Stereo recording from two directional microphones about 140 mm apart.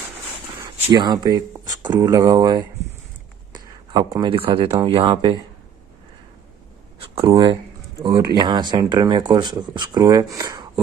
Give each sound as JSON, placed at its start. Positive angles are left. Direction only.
{"t": 0.9, "sound": "speech", "side_deg": -30}
{"t": 7.0, "sound": "speech", "side_deg": -40}